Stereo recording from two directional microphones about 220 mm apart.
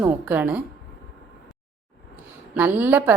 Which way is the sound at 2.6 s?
10° right (ahead or behind).